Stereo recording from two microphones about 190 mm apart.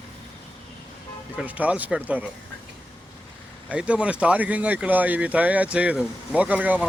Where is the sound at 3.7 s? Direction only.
5° right (ahead or behind).